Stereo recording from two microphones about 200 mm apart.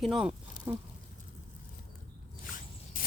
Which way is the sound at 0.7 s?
10° right (ahead or behind).